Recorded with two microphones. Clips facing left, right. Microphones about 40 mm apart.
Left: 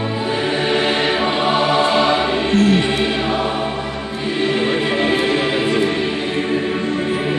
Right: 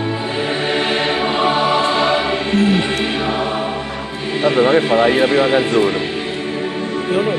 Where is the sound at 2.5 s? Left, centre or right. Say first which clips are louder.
Even; right.